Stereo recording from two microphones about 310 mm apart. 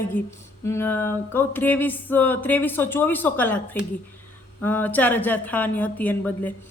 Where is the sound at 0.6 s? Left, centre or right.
Centre.